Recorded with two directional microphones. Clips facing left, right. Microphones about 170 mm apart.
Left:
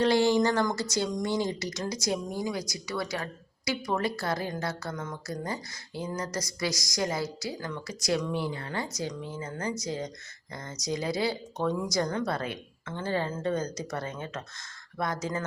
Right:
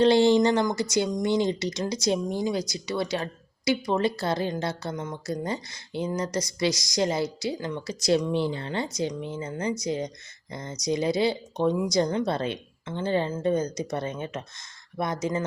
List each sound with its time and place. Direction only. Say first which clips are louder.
0.0 s a woman's voice: right 4 dB; 25° right (ahead or behind)